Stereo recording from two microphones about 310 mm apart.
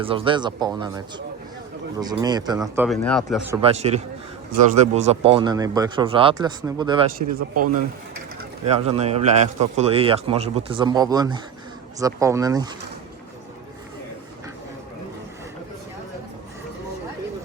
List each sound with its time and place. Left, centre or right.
0.0 s a man's voice: centre
3.5 s speech: centre
7.3 s speech: right
8.6 s speech: centre